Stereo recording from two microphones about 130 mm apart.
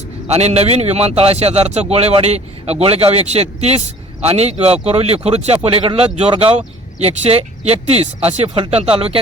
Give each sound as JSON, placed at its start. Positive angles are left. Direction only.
{"t": 0.3, "sound": "a man's voice", "side_deg": -55}